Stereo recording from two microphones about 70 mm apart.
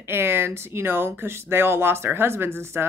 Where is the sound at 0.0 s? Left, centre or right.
Right.